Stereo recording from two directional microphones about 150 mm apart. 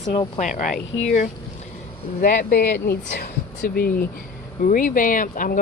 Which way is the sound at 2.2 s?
70° left (ahead or behind).